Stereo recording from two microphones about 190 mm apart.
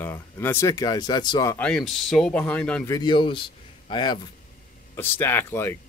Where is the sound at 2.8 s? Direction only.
20° left (ahead or behind).